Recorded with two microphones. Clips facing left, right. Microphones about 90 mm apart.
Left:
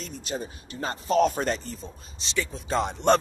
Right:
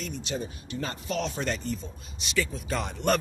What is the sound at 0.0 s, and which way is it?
Speech, 40° left (ahead or behind).